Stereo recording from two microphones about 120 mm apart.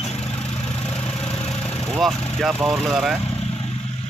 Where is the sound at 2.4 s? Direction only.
Centre (ahead or behind).